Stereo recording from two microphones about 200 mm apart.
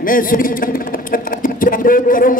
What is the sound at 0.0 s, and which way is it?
A man's voice, 45° left (ahead or behind).